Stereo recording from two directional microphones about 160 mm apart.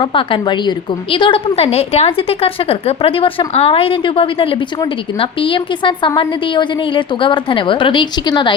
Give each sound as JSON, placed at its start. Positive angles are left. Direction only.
{"t": 0.0, "sound": "a woman's voice", "side_deg": 35}